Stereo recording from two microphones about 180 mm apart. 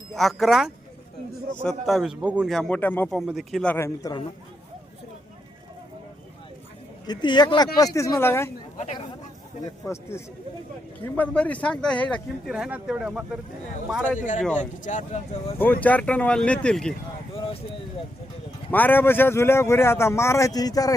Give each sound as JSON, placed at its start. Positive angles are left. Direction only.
{"t": 0.2, "sound": "speech", "side_deg": 0}
{"t": 1.9, "sound": "speech", "side_deg": -5}
{"t": 3.2, "sound": "a man's voice", "side_deg": 0}
{"t": 7.1, "sound": "a man's voice", "side_deg": 25}
{"t": 9.8, "sound": "a man's voice", "side_deg": 15}
{"t": 12.5, "sound": "speech", "side_deg": -5}
{"t": 14.2, "sound": "speech", "side_deg": 45}
{"t": 15.5, "sound": "a man's voice", "side_deg": 10}
{"t": 17.3, "sound": "speech", "side_deg": 30}
{"t": 18.7, "sound": "a man's voice", "side_deg": 10}